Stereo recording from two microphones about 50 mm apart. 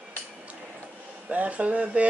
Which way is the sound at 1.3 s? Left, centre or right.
Right.